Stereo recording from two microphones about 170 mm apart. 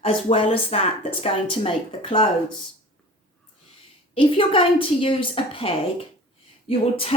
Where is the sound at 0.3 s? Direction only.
35° left (ahead or behind).